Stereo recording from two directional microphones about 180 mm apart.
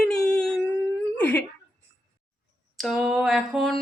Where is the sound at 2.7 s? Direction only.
Centre (ahead or behind).